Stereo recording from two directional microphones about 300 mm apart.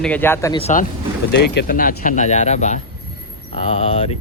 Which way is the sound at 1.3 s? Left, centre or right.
Left.